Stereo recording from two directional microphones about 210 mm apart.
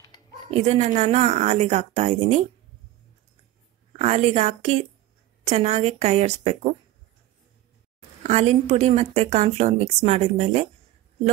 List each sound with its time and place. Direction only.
0.5 s speech: 30° right (ahead or behind)
4.0 s speech: 30° right (ahead or behind)
8.2 s speech: 30° right (ahead or behind)